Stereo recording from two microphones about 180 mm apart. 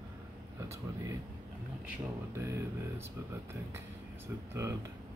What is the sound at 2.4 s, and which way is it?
Speech, 15° right (ahead or behind).